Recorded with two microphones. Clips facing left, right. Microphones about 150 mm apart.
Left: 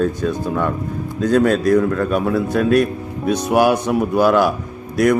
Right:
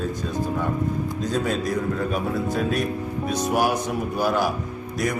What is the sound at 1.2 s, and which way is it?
A man's voice, 70° left (ahead or behind).